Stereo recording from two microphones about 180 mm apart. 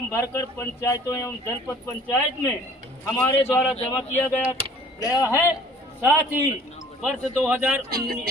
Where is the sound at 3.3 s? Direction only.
15° left (ahead or behind).